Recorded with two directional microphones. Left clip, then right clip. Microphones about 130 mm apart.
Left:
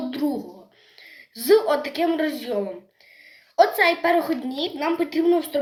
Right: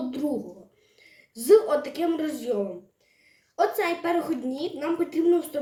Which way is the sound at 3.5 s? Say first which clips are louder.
Left 7 dB; 20° right (ahead or behind).